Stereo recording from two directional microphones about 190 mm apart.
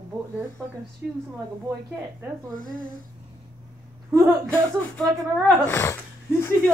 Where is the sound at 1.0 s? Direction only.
10° right (ahead or behind).